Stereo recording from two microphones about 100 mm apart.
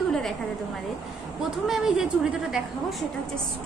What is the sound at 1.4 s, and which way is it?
A woman's voice, 5° right (ahead or behind).